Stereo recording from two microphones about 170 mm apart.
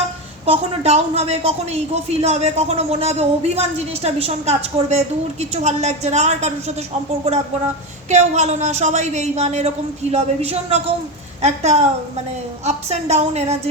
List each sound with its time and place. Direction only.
0.4 s a woman's voice: 35° right (ahead or behind)
8.1 s a woman's voice: 40° right (ahead or behind)